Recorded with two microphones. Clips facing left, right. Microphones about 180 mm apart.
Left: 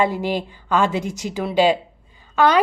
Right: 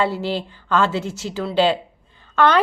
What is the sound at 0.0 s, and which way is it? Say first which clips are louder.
A woman's voice: left 1 dB; 15° left (ahead or behind).